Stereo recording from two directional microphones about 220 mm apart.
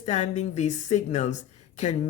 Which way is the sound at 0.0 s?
30° left (ahead or behind).